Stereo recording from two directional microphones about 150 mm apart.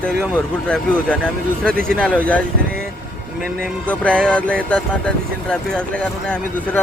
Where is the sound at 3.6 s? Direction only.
5° left (ahead or behind).